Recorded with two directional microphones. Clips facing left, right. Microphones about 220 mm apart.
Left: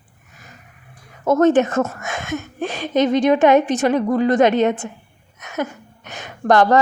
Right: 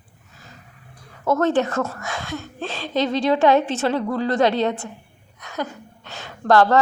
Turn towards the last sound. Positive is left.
turn(degrees=20)  # may be behind; listen again after turning